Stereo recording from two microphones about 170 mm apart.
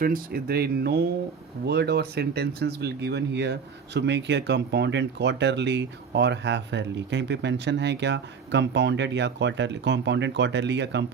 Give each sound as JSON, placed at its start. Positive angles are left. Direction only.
{"t": 0.0, "sound": "speech", "side_deg": -60}